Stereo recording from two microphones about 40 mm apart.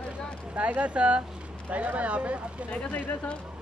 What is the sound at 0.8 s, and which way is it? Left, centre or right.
Speech, right.